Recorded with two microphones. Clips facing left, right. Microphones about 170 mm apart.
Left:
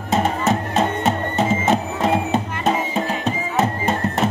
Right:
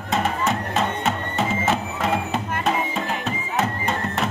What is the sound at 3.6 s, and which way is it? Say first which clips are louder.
Music: left 3 dB; 40° left (ahead or behind).